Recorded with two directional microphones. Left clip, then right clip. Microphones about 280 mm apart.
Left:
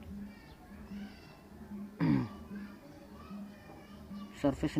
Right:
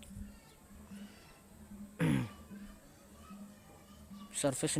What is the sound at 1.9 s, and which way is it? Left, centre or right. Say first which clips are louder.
Music: left 3 dB; right.